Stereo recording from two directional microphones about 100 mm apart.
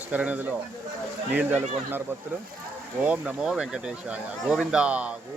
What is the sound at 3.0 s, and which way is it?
Speech, 10° right (ahead or behind).